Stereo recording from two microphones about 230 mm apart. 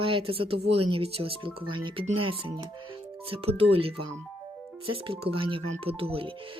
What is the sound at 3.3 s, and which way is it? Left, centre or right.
Speech, right.